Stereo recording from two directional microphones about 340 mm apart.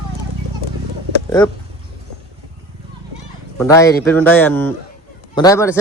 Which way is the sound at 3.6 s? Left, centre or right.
Centre.